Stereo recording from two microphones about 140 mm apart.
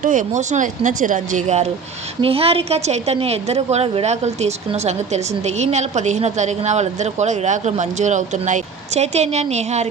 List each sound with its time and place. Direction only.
0.0 s a woman's voice: 65° right (ahead or behind)